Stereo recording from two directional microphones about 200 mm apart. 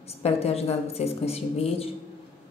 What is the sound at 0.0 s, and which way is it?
A woman's voice, 30° left (ahead or behind).